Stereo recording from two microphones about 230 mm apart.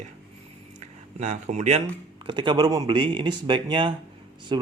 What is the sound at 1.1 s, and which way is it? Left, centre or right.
Speech, right.